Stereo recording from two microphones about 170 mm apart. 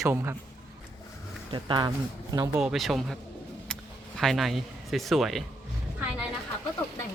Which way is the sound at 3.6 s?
5° left (ahead or behind).